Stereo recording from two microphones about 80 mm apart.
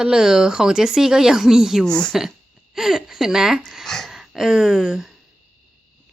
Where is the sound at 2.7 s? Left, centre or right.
Centre.